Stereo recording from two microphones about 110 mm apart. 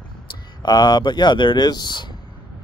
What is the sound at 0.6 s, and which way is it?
Speech, 40° left (ahead or behind).